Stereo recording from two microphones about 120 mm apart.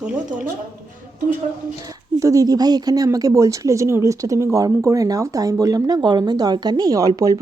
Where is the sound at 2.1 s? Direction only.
25° right (ahead or behind).